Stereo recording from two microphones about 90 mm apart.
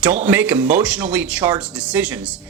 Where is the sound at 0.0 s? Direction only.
15° right (ahead or behind).